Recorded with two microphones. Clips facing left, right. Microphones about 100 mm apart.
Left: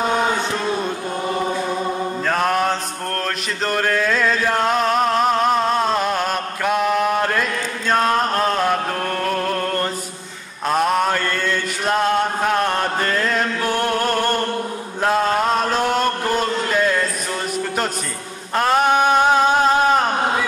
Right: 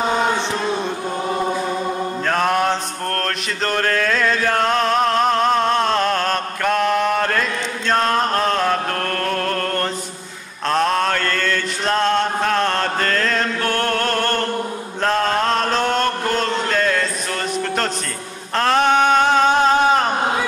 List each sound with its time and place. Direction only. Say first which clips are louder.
0.0 s chant: even; centre (ahead or behind)
7.9 s music: even; 5° left (ahead or behind)
10.7 s chant: even; 10° left (ahead or behind)
18.6 s a sound: even; 10° left (ahead or behind)